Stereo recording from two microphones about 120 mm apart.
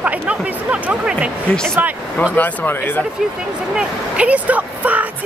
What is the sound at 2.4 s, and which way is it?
Speech, 15° left (ahead or behind).